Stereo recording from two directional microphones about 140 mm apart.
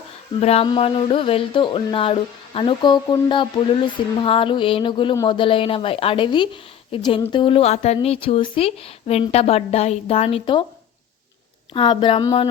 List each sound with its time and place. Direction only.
0.3 s speech: 45° left (ahead or behind)
11.7 s speech: 40° left (ahead or behind)